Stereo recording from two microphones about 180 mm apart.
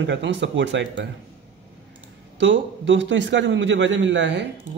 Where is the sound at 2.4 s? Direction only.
90° right.